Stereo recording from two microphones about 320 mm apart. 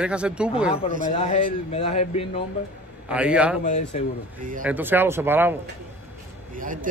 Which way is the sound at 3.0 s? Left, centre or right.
Centre.